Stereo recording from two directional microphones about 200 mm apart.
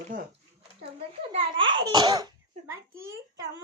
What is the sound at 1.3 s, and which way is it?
A child's voice, 25° right (ahead or behind).